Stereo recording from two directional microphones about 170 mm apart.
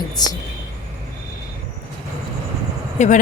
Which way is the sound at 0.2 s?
25° left (ahead or behind).